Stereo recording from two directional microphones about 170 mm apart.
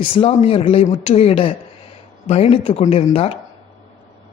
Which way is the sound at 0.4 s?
35° left (ahead or behind).